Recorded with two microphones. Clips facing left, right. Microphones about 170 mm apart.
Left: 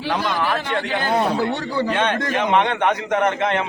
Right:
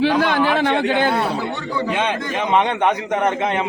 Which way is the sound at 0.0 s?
80° right.